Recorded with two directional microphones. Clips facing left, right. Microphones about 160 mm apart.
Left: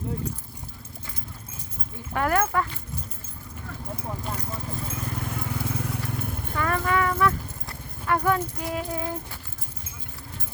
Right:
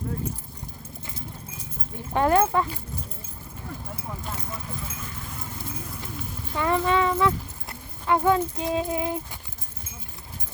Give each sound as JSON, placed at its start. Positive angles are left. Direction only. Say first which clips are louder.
{"t": 2.1, "sound": "speech", "louder": "right 3 dB", "side_deg": -25}
{"t": 5.4, "sound": "a sound", "louder": "left 5 dB", "side_deg": 75}
{"t": 6.6, "sound": "speech", "louder": "right 2 dB", "side_deg": -20}